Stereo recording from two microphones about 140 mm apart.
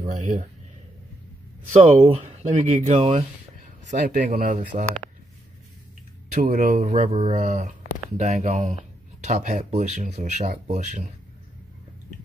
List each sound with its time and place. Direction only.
0.0 s speech: 50° right (ahead or behind)
1.7 s speech: 50° right (ahead or behind)
3.0 s speech: 45° right (ahead or behind)
3.8 s speech: 70° right (ahead or behind)
6.3 s speech: 60° right (ahead or behind)
7.1 s speech: 40° right (ahead or behind)
7.3 s speech: 60° right (ahead or behind)